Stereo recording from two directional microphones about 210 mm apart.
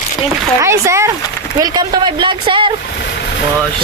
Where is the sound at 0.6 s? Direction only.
15° right (ahead or behind).